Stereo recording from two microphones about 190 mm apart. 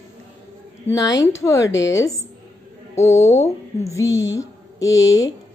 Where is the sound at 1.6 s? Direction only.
75° left (ahead or behind).